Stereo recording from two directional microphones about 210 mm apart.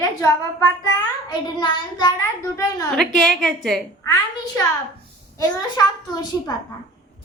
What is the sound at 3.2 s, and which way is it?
Speech, centre (ahead or behind).